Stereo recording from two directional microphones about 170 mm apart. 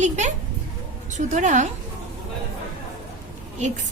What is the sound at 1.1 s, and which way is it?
Speech, 45° right (ahead or behind).